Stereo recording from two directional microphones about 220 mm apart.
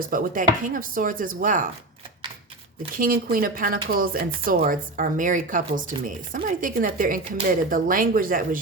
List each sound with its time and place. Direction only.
0.1 s speech: 40° right (ahead or behind)
2.9 s speech: 40° right (ahead or behind)